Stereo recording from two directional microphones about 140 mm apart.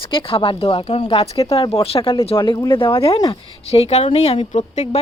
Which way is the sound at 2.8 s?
40° left (ahead or behind).